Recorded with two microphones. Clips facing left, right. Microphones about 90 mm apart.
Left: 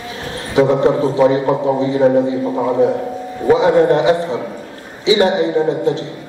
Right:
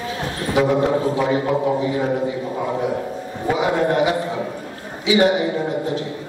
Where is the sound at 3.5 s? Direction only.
30° left (ahead or behind).